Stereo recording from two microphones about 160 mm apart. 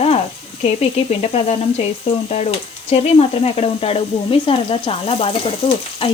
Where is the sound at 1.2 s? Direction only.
45° left (ahead or behind).